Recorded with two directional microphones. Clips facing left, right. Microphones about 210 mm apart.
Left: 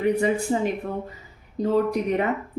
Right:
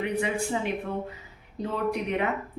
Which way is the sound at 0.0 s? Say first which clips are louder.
Left 6 dB; 40° left (ahead or behind).